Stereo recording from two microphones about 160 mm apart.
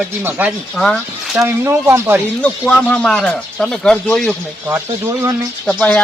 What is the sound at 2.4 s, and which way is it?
Speech, 10° left (ahead or behind).